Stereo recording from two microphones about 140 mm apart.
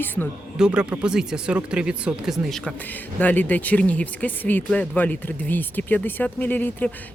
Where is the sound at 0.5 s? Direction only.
5° right (ahead or behind); by 6.9 s 15° left (ahead or behind).